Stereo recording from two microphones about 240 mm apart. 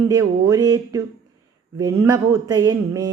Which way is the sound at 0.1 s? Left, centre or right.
Centre.